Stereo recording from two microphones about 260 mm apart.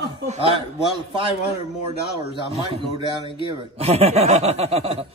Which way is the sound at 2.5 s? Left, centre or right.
Centre.